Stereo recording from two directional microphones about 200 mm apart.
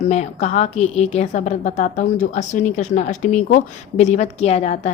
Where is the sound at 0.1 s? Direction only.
35° left (ahead or behind).